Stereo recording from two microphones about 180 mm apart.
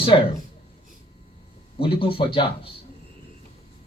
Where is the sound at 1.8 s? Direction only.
30° left (ahead or behind).